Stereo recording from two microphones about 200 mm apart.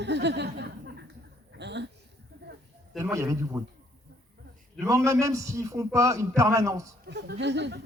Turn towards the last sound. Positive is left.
turn(degrees=-60)  # may be behind; listen again after turning